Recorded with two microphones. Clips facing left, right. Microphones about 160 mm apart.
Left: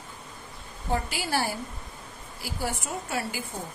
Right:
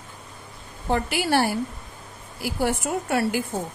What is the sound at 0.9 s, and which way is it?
Speech, 65° right (ahead or behind).